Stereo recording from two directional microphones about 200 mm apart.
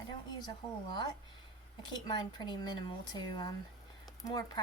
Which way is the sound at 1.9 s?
20° left (ahead or behind).